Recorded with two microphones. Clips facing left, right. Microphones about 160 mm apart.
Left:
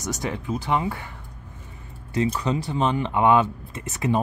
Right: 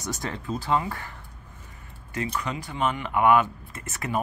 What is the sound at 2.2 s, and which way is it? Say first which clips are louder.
Speech: left 7 dB; 30° left (ahead or behind).